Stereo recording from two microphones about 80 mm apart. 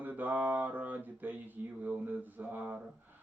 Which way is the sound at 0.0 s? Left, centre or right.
Right.